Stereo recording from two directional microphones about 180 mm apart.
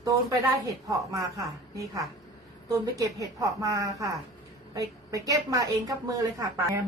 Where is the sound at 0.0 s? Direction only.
20° right (ahead or behind).